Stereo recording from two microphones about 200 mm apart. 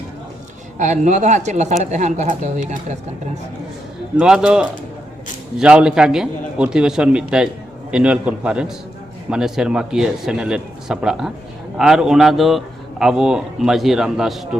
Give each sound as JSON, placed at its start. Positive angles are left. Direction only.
{"t": 0.8, "sound": "speech", "side_deg": -35}
{"t": 4.2, "sound": "a man's voice", "side_deg": -5}